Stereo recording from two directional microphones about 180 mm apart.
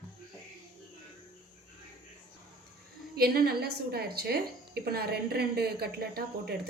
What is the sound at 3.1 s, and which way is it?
A woman's voice, 60° right (ahead or behind).